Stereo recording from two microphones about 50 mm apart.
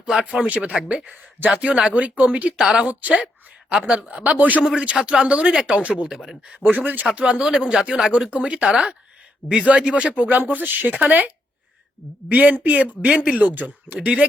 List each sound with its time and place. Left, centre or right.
0.4 s speech: right
2.6 s speech: centre
2.9 s speech: right
3.7 s speech: centre
4.2 s speech: right
4.8 s speech: right
6.6 s speech: right
12.3 s speech: right
13.4 s speech: right